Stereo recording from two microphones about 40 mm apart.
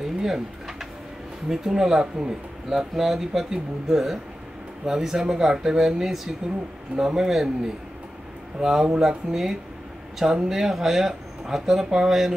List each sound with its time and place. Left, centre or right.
0.0 s pigeon: centre
1.5 s speech: centre
3.0 s speech: centre